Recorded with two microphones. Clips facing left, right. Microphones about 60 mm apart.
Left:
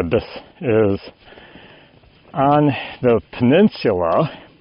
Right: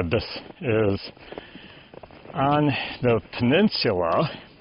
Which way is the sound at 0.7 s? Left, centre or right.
Centre.